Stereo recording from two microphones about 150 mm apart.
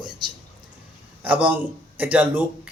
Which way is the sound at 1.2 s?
10° right (ahead or behind).